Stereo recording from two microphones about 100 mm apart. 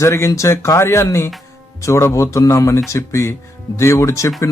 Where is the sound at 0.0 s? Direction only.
30° left (ahead or behind).